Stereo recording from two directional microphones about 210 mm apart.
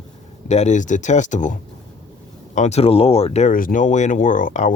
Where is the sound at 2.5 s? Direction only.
30° left (ahead or behind).